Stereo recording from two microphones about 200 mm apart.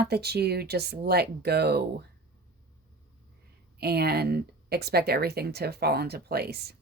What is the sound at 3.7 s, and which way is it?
A woman's voice, 55° right (ahead or behind).